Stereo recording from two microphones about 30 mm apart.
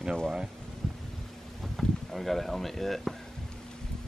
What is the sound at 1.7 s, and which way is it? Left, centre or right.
Speech, centre.